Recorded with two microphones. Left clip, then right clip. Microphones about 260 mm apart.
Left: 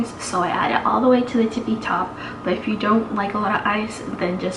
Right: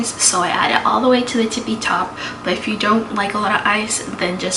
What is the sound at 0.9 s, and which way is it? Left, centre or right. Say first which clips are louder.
Speech: right 1 dB; left.